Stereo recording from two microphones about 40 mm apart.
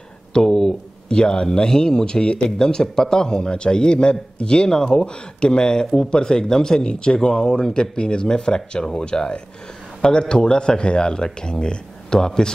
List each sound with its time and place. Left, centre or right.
0.5 s speech: centre
1.0 s a man's voice: left